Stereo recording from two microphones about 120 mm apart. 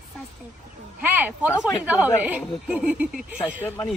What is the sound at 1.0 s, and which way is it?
A woman's voice, 15° right (ahead or behind).